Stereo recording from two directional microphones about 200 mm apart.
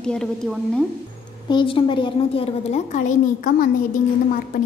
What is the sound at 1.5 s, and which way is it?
A woman's voice, 25° left (ahead or behind).